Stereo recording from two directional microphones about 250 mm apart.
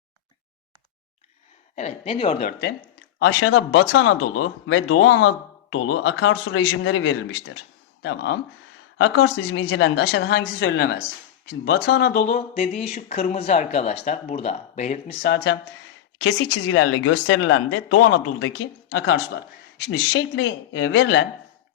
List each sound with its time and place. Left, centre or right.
1.7 s speech: left
3.2 s speech: left
12.2 s speech: left
16.2 s speech: left